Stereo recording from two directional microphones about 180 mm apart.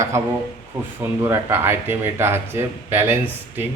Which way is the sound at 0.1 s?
15° right (ahead or behind).